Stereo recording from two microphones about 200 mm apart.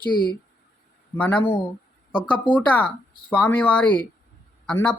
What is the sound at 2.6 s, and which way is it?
Speech, 5° left (ahead or behind).